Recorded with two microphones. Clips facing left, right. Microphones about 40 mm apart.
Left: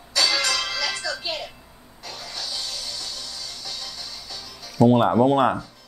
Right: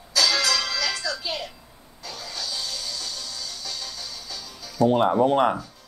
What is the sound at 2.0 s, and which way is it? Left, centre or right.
Vehicle, left.